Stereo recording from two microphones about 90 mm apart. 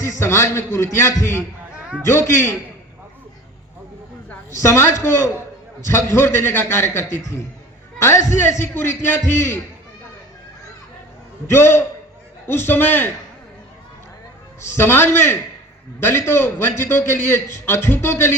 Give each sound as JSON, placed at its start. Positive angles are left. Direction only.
{"t": 0.0, "sound": "a man's voice", "side_deg": 35}
{"t": 4.5, "sound": "a man's voice", "side_deg": 30}
{"t": 11.4, "sound": "a man's voice", "side_deg": 25}
{"t": 14.7, "sound": "a man's voice", "side_deg": 25}